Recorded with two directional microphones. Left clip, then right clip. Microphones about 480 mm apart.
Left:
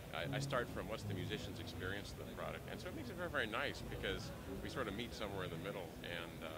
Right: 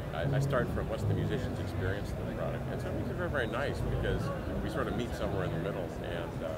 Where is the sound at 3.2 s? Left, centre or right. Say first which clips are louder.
Right 6 dB; centre.